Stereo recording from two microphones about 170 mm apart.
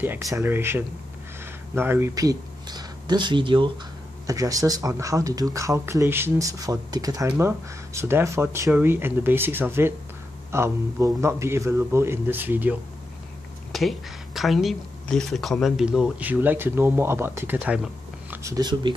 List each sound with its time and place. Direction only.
0.0 s speech: 15° right (ahead or behind)
13.7 s speech: centre (ahead or behind); by 18.9 s 25° right (ahead or behind)